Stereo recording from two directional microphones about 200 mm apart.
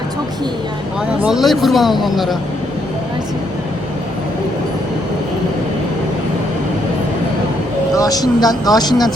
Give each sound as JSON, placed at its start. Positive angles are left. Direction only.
{"t": 1.2, "sound": "speech", "side_deg": 0}
{"t": 7.9, "sound": "speech", "side_deg": 20}